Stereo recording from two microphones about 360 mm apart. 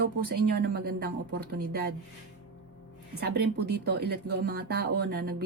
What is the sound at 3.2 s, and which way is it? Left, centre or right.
Speech, right.